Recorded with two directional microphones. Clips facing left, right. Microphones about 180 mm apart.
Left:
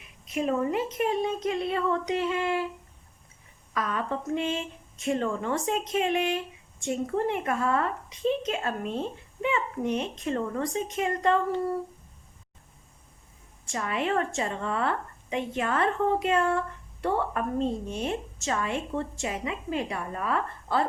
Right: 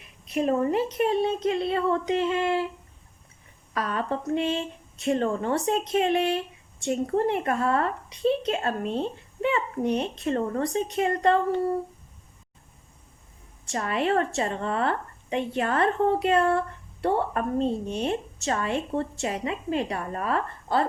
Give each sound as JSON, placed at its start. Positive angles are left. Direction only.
{"t": 0.3, "sound": "a woman's voice", "side_deg": -40}
{"t": 3.8, "sound": "a woman's voice", "side_deg": -35}
{"t": 13.7, "sound": "a woman's voice", "side_deg": -40}